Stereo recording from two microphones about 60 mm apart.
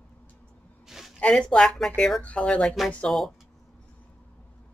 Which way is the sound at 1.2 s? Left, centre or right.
Centre.